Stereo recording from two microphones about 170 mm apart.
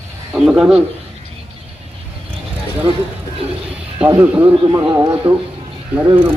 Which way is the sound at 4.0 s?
10° right (ahead or behind).